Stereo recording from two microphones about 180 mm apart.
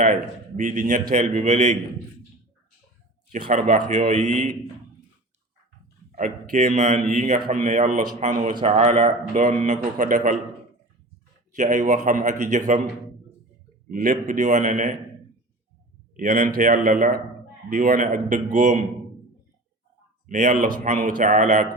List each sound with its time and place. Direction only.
0.0 s a man's voice: 45° right (ahead or behind)
3.7 s a man's voice: 45° right (ahead or behind)
6.1 s a man's voice: 45° right (ahead or behind)
7.3 s a man's voice: 50° right (ahead or behind)
11.5 s a man's voice: 40° right (ahead or behind)
13.8 s a man's voice: 50° right (ahead or behind)
16.1 s a man's voice: 45° right (ahead or behind)
20.2 s a man's voice: 45° right (ahead or behind)